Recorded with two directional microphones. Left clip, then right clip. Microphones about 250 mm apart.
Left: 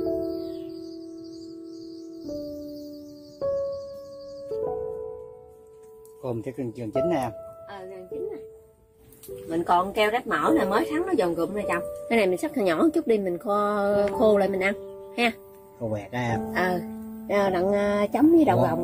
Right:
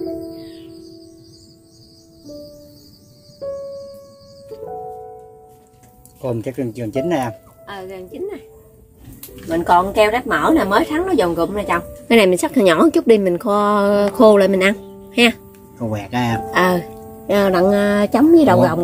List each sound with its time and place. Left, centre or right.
6.2 s speech: centre
9.5 s speech: centre
12.1 s a woman's voice: right
15.9 s speech: centre
16.5 s a woman's voice: right